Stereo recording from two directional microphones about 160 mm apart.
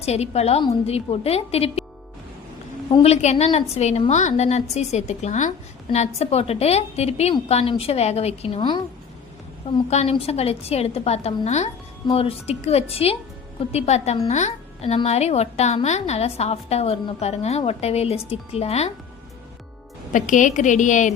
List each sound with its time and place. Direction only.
0.0 s a woman's voice: 40° left (ahead or behind)
2.9 s a woman's voice: 40° left (ahead or behind)
9.9 s a woman's voice: 40° left (ahead or behind)
20.1 s a woman's voice: 50° left (ahead or behind)